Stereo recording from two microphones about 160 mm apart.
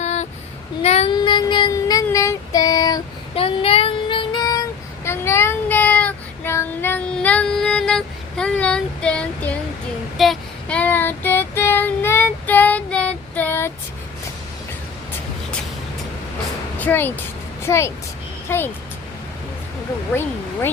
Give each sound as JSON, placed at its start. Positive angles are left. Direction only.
{"t": 0.0, "sound": "a sound", "side_deg": 45}
{"t": 0.8, "sound": "child singing", "side_deg": 40}
{"t": 1.1, "sound": "child singing", "side_deg": 30}
{"t": 3.3, "sound": "child singing", "side_deg": 35}
{"t": 16.7, "sound": "a woman's voice", "side_deg": 10}
{"t": 20.1, "sound": "speech", "side_deg": 15}